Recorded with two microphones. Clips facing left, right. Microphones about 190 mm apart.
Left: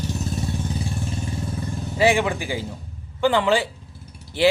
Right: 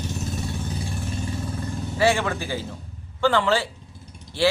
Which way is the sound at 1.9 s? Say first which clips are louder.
Left 2 dB; 15° left (ahead or behind).